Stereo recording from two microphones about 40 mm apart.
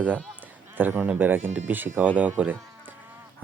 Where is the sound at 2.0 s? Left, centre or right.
Right.